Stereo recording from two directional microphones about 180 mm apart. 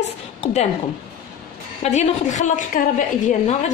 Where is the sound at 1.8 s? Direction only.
40° left (ahead or behind).